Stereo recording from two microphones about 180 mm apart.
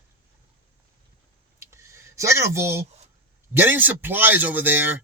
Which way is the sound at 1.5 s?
15° right (ahead or behind).